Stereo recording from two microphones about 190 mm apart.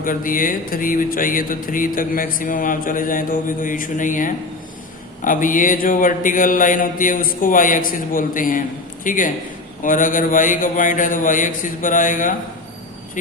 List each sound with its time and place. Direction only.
0.0 s speech: 45° left (ahead or behind)